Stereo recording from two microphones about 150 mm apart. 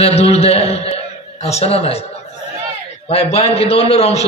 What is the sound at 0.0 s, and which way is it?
A man's voice, 45° left (ahead or behind).